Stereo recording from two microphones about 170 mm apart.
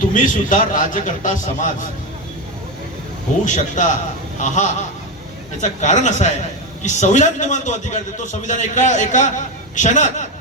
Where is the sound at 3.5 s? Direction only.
45° left (ahead or behind).